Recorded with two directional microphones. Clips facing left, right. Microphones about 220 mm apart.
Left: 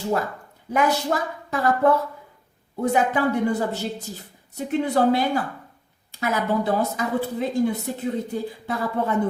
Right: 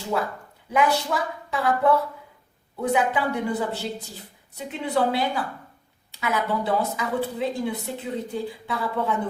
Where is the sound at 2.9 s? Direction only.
45° left (ahead or behind).